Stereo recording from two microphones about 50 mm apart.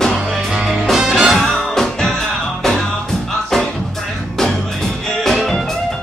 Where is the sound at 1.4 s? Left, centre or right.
Centre.